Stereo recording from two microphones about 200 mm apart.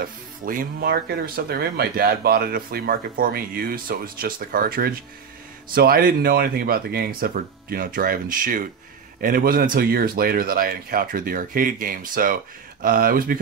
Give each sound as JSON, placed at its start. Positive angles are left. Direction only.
{"t": 0.0, "sound": "speech", "side_deg": -45}